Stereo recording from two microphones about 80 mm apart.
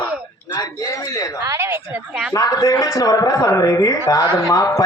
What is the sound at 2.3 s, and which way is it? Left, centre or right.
A man's voice, left.